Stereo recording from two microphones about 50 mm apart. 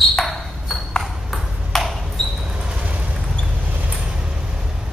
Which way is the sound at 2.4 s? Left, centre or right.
Centre.